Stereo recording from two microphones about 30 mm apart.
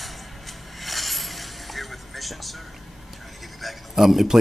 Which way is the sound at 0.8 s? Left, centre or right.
Centre.